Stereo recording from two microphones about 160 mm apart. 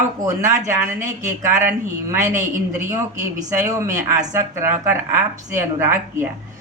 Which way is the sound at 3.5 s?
20° right (ahead or behind).